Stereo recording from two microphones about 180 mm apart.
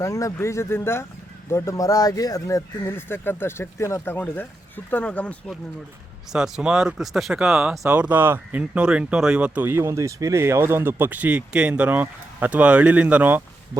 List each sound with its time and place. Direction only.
0.0 s speech: 15° left (ahead or behind)
6.3 s speech: 5° right (ahead or behind)